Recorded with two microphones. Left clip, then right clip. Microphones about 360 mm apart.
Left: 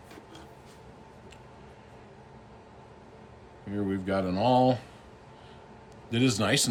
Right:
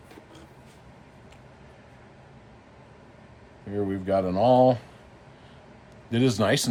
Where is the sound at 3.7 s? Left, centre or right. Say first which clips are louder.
Right 5 dB; centre.